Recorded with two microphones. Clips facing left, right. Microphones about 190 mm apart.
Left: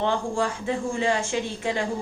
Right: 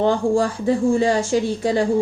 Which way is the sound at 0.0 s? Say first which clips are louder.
Right 7 dB; 35° right (ahead or behind).